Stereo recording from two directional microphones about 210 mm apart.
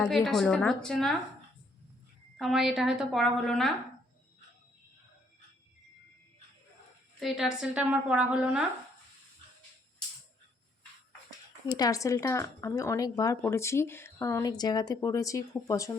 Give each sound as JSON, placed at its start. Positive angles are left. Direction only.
{"t": 0.0, "sound": "a woman's voice", "side_deg": 0}
{"t": 2.4, "sound": "a woman's voice", "side_deg": 0}
{"t": 7.2, "sound": "a woman's voice", "side_deg": 0}
{"t": 11.8, "sound": "speech", "side_deg": 15}